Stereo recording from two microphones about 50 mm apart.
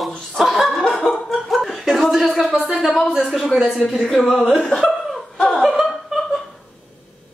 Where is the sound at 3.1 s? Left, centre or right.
Centre.